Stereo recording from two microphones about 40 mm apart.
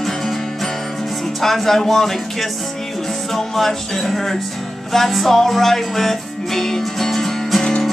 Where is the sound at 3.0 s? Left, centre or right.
Centre.